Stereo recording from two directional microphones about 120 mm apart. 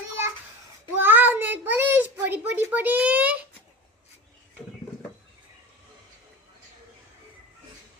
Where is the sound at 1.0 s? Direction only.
15° right (ahead or behind).